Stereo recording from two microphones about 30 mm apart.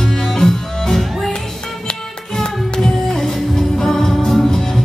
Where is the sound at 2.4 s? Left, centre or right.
Centre.